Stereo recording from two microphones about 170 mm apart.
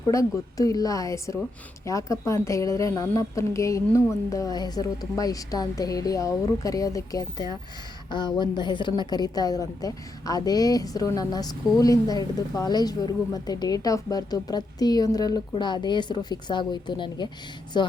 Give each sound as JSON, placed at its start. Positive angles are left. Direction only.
{"t": 0.1, "sound": "a woman's voice", "side_deg": 20}